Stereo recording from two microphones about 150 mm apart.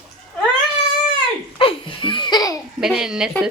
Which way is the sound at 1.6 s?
35° left (ahead or behind).